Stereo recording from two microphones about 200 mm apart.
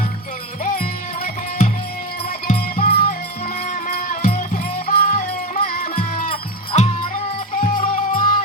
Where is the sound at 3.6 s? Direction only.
40° left (ahead or behind).